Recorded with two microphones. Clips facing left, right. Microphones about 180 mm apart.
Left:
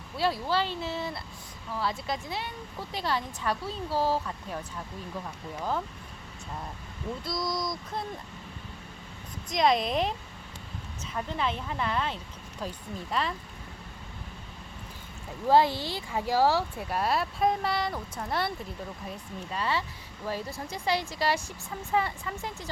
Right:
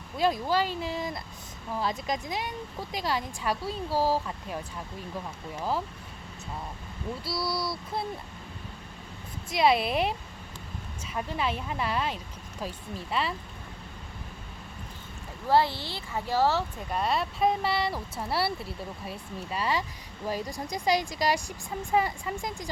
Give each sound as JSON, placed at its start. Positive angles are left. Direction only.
{"t": 0.2, "sound": "speech", "side_deg": -20}
{"t": 7.3, "sound": "speech", "side_deg": -5}
{"t": 9.5, "sound": "speech", "side_deg": -5}
{"t": 15.4, "sound": "speech", "side_deg": 15}